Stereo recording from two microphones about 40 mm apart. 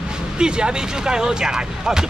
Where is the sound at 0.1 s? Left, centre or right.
Right.